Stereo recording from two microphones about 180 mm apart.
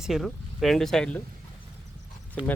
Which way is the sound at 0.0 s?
Centre (ahead or behind).